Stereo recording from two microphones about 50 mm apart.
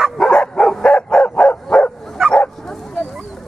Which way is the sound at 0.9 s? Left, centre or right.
Left.